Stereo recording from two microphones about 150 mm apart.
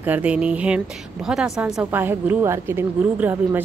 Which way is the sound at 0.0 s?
10° right (ahead or behind).